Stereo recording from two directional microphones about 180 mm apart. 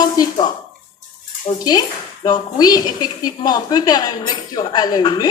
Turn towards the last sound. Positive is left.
turn(degrees=25)  # may be behind; listen again after turning